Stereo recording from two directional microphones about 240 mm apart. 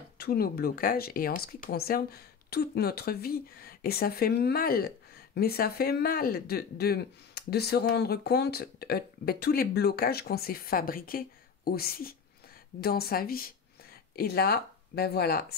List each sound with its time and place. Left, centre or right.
0.2 s speech: left